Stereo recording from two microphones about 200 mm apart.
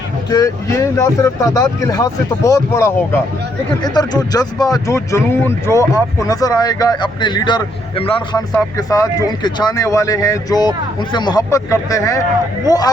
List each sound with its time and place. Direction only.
0.3 s speech: 15° left (ahead or behind)